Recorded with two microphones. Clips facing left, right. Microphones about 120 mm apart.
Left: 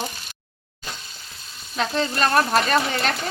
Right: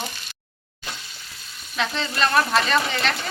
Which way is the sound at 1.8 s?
40° left (ahead or behind).